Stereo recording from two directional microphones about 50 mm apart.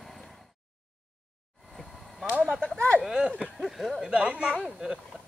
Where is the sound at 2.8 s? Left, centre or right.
Left.